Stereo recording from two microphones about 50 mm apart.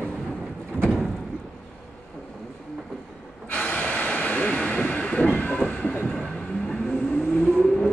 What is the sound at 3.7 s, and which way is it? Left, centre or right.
Train, left.